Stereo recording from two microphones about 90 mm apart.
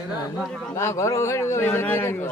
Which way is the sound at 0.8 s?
35° left (ahead or behind).